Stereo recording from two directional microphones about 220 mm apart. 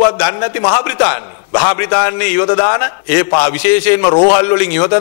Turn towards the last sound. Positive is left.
turn(degrees=20)  # may be behind; listen again after turning